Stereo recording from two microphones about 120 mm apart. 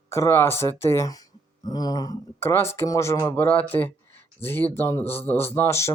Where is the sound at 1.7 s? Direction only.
30° left (ahead or behind).